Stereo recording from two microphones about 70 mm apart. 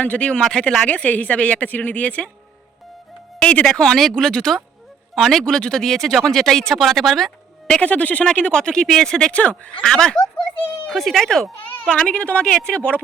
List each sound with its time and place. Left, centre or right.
0.0 s a woman's voice: centre
3.4 s speech: centre
7.7 s speech: centre
11.9 s speech: centre